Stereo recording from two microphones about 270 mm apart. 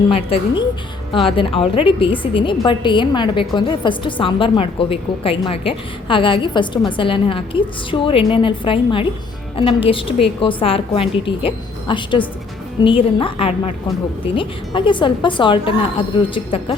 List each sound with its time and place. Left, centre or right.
0.1 s a woman's voice: left